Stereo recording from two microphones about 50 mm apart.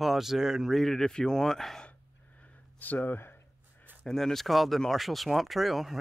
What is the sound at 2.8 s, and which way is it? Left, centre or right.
Speech, left.